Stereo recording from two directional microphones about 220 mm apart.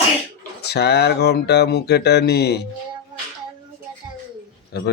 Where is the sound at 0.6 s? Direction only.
50° left (ahead or behind).